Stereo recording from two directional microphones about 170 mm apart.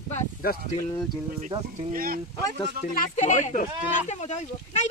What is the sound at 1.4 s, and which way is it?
Speech, 40° right (ahead or behind).